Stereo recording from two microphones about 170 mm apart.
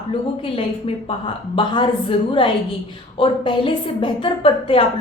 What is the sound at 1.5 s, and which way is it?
A woman's voice, 30° left (ahead or behind).